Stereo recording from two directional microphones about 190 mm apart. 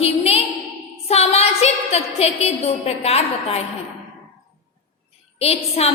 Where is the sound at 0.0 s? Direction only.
30° left (ahead or behind).